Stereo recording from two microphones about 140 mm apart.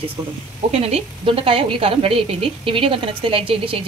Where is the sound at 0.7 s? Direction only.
50° right (ahead or behind).